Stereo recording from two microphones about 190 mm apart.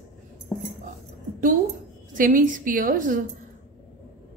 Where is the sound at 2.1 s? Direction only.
45° right (ahead or behind).